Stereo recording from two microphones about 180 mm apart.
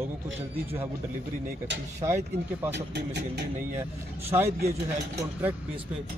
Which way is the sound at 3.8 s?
15° right (ahead or behind).